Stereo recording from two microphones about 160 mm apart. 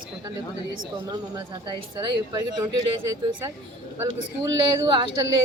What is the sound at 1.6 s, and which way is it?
Speech, 30° right (ahead or behind).